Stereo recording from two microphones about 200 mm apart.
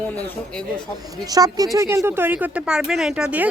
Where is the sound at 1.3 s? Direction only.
20° right (ahead or behind).